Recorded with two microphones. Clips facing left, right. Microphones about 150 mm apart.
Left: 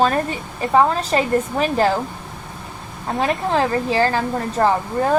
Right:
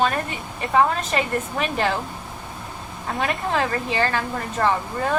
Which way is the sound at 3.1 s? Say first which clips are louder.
Left 4 dB; 30° left (ahead or behind).